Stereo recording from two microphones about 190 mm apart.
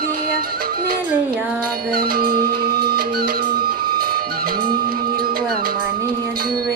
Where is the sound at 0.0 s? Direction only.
50° right (ahead or behind).